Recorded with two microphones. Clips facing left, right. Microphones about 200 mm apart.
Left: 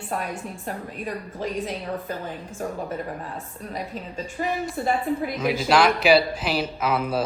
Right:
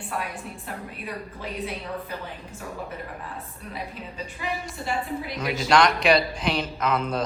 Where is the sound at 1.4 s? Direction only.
45° left (ahead or behind).